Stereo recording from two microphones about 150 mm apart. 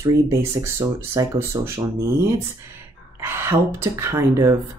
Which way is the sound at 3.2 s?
15° right (ahead or behind).